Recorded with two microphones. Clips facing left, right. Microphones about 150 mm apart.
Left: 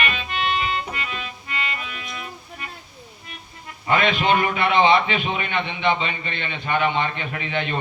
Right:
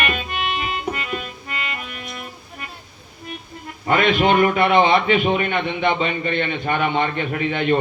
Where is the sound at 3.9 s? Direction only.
50° right (ahead or behind).